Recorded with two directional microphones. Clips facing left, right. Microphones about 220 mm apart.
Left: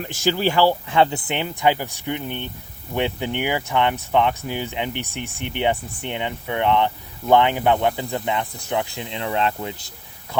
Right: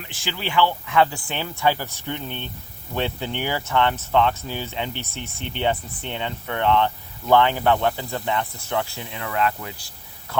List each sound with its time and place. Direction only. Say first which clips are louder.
0.0 s speech: left 10 dB; 45° left (ahead or behind); by 9.9 s 20° left (ahead or behind)